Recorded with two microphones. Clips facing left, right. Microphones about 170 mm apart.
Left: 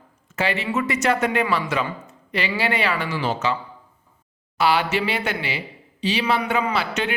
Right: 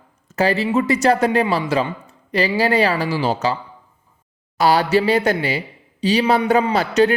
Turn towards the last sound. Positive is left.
turn(degrees=-40)  # may be behind; listen again after turning